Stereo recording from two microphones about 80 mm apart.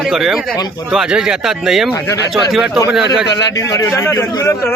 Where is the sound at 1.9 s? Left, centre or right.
Left.